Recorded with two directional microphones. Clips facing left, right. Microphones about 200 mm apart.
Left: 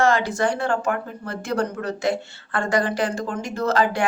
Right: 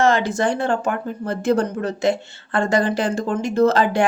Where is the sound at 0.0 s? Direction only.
20° right (ahead or behind).